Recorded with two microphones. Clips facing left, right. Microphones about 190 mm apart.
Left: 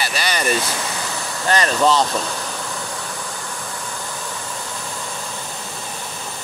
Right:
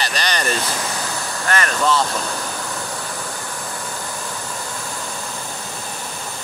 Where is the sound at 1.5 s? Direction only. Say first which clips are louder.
Left 3 dB; 25° left (ahead or behind).